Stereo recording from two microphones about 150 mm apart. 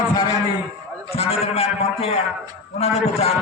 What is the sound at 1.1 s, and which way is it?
Speech, 40° left (ahead or behind).